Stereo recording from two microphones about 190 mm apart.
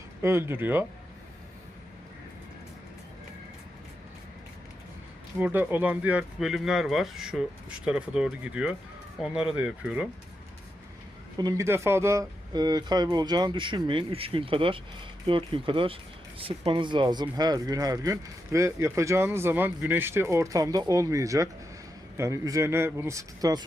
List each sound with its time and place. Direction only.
0.2 s speech: 15° right (ahead or behind)
5.4 s speech: 10° right (ahead or behind)
11.3 s speech: 20° right (ahead or behind)